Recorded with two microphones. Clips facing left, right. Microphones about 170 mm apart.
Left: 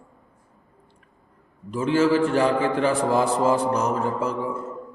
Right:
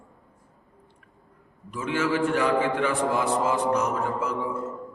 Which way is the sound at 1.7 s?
30° left (ahead or behind).